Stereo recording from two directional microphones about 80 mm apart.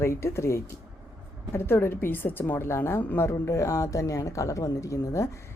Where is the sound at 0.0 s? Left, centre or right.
Left.